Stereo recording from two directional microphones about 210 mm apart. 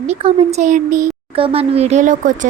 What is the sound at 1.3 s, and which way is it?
A woman's voice, 25° right (ahead or behind).